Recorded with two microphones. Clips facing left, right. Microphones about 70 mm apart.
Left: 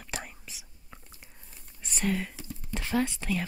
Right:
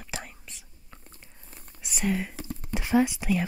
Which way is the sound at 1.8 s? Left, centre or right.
Centre.